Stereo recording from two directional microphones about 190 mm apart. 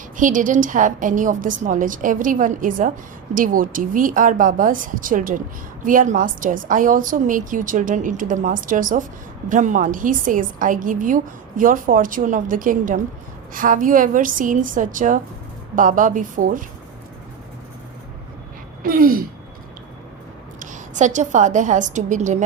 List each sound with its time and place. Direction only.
0.2 s a woman's voice: 45° right (ahead or behind)
18.8 s speech: 50° right (ahead or behind)
20.6 s a woman's voice: 40° right (ahead or behind)